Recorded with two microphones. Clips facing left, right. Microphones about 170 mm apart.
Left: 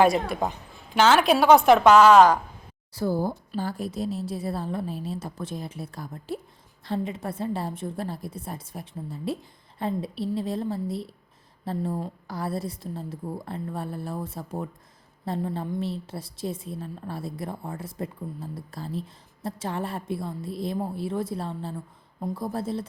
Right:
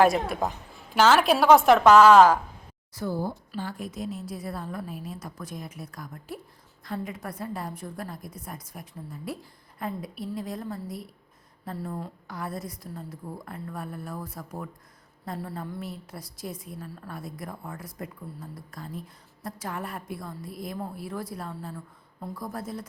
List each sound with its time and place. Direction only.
0.0 s a woman's voice: centre (ahead or behind)
2.9 s a woman's voice: 35° left (ahead or behind)